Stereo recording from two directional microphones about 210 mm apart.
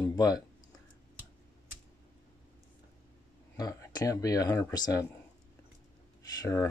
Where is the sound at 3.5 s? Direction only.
15° left (ahead or behind).